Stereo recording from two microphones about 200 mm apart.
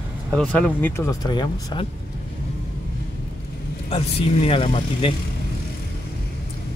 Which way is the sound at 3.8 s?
30° left (ahead or behind).